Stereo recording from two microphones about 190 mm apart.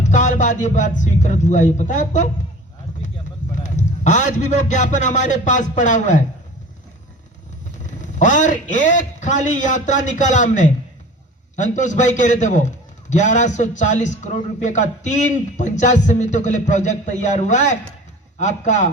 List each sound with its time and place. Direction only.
0.0 s a man's voice: 40° left (ahead or behind)
3.5 s a man's voice: 40° left (ahead or behind)
8.2 s a man's voice: 40° left (ahead or behind)